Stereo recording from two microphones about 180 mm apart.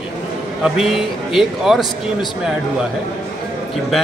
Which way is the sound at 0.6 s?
Centre (ahead or behind).